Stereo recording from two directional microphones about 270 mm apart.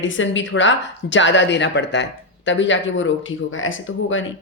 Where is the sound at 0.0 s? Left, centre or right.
Left.